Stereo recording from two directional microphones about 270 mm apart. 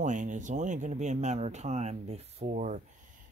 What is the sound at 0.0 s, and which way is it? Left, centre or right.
Speech, right.